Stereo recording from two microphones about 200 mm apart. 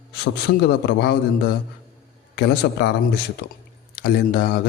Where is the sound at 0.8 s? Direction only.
55° left (ahead or behind).